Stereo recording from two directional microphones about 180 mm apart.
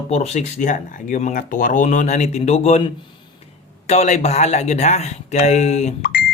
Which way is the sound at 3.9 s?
40° left (ahead or behind).